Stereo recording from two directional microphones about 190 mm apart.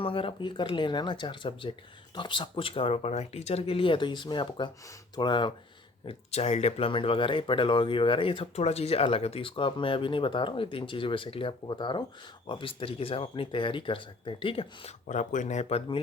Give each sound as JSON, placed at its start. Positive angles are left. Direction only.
{"t": 0.0, "sound": "speech", "side_deg": 30}